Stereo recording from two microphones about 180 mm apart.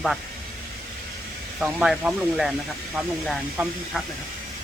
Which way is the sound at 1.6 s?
5° right (ahead or behind).